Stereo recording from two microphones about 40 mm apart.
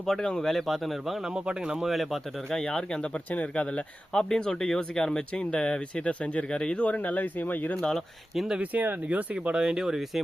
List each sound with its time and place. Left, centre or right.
0.1 s speech: centre
0.4 s speech: centre
1.5 s speech: right
2.6 s speech: centre
3.0 s speech: left
4.3 s speech: left
6.1 s speech: left
6.8 s speech: left
7.8 s speech: centre
8.7 s speech: right
9.0 s speech: right
9.6 s speech: centre